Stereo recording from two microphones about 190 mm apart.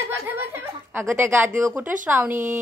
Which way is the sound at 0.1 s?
10° right (ahead or behind).